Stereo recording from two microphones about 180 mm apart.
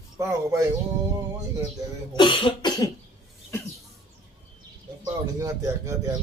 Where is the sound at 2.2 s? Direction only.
30° left (ahead or behind).